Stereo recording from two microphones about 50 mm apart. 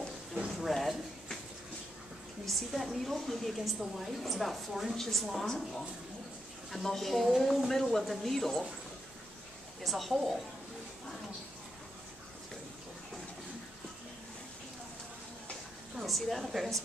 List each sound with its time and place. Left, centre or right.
0.6 s a sound: centre
2.4 s a woman's voice: centre
6.7 s a woman's voice: centre
9.8 s a woman's voice: centre
16.1 s a woman's voice: centre